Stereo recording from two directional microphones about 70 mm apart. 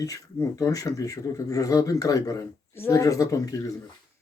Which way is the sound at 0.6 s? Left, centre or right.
Left.